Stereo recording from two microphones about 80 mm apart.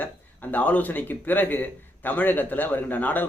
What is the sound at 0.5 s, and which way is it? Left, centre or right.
A man's voice, centre.